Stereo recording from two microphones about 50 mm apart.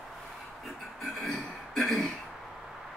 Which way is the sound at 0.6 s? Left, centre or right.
Centre.